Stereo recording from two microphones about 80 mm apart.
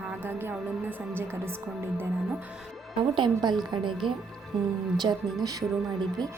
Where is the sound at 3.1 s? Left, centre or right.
Right.